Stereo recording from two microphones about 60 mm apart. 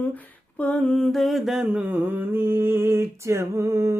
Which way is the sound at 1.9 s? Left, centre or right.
Right.